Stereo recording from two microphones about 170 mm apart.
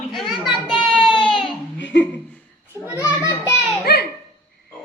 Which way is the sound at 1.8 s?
90° left.